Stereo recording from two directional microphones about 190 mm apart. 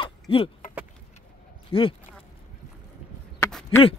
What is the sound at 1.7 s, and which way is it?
Speech, 30° left (ahead or behind).